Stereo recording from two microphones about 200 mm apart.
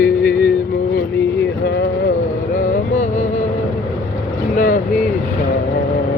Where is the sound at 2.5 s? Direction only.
40° left (ahead or behind).